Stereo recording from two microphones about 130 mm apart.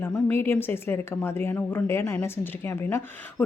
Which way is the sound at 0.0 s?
15° left (ahead or behind).